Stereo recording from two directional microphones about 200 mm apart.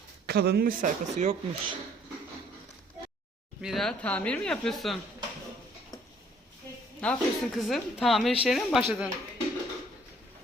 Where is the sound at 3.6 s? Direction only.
Centre (ahead or behind).